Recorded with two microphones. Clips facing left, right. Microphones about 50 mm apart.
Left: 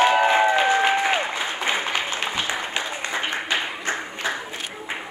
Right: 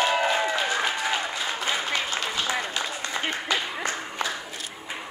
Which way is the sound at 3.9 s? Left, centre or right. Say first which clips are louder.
Left 3 dB; left.